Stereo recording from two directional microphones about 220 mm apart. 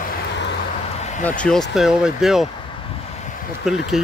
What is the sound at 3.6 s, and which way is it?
Speech, centre (ahead or behind).